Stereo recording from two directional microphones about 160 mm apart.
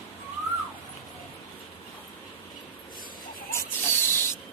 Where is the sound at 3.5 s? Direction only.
15° left (ahead or behind).